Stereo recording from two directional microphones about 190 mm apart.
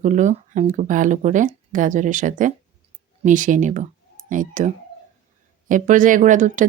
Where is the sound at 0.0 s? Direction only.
40° right (ahead or behind).